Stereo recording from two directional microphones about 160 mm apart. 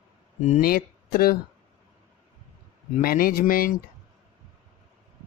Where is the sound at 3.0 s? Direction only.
65° left (ahead or behind).